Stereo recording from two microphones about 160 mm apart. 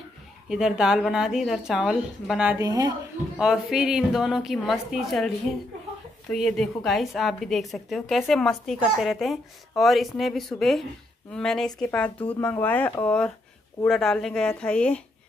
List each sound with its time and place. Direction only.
0.5 s a woman's voice: 5° right (ahead or behind)
2.6 s a woman's voice: 20° right (ahead or behind)
3.3 s a woman's voice: 5° right (ahead or behind)